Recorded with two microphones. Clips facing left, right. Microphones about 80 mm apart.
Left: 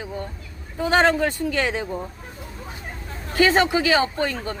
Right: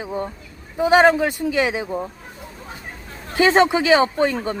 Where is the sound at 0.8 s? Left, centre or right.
Centre.